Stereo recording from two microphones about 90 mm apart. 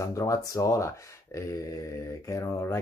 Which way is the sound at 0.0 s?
35° left (ahead or behind).